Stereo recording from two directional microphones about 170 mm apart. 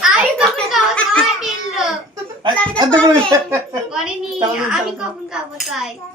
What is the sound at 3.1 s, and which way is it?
Speech, 20° right (ahead or behind).